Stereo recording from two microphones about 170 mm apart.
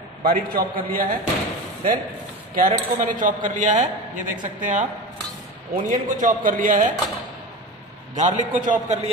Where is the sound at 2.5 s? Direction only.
50° right (ahead or behind).